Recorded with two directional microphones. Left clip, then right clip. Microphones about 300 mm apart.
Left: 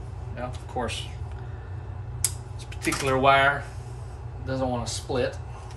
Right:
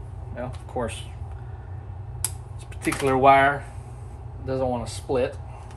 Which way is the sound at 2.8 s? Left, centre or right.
Centre.